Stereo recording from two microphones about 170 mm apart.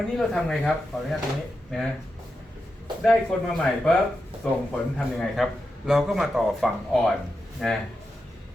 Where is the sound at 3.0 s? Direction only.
5° left (ahead or behind).